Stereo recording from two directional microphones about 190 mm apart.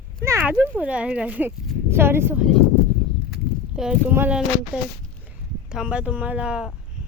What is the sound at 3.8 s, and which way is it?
Speech, 5° right (ahead or behind).